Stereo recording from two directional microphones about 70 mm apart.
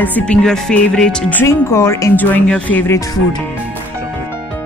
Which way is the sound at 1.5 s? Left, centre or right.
Left.